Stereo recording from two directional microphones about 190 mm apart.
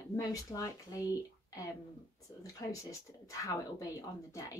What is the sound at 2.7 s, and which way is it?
Speech, 15° left (ahead or behind).